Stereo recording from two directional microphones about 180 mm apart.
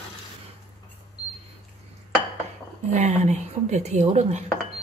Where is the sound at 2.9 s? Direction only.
40° right (ahead or behind).